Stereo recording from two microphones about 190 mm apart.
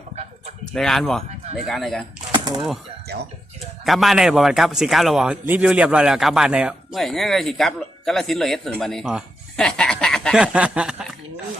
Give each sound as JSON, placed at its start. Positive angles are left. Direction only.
{"t": 0.7, "sound": "a man's voice", "side_deg": 0}
{"t": 2.3, "sound": "typewriter", "side_deg": -20}
{"t": 3.8, "sound": "a man's voice", "side_deg": 0}